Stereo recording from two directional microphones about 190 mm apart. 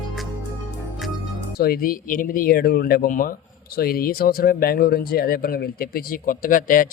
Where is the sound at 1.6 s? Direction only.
55° left (ahead or behind).